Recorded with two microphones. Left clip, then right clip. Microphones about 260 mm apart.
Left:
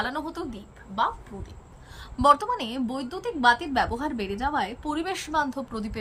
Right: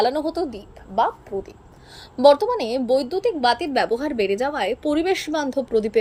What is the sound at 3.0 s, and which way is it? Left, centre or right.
Speech, centre.